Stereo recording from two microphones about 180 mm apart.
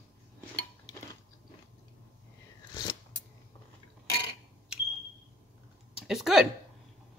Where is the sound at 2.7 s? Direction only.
20° left (ahead or behind).